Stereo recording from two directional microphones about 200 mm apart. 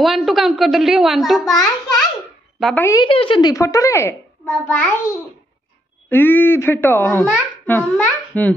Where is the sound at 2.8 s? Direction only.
20° left (ahead or behind).